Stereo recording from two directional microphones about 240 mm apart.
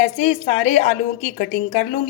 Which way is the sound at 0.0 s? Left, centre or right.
Left.